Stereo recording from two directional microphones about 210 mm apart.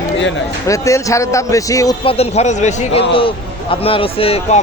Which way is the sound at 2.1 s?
30° left (ahead or behind).